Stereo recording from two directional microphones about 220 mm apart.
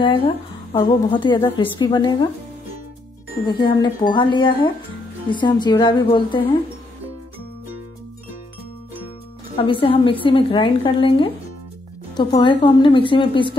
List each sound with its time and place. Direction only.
0.7 s a woman's voice: 20° left (ahead or behind)
3.4 s a woman's voice: 20° left (ahead or behind)
9.6 s a woman's voice: 25° left (ahead or behind)